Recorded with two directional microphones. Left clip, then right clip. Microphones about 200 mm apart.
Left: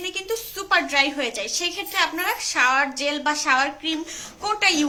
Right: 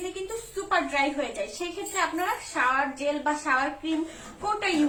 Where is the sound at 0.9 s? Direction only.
45° left (ahead or behind).